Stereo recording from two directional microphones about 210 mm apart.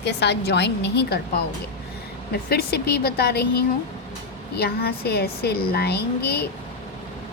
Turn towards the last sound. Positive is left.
turn(degrees=50)  # may be behind; listen again after turning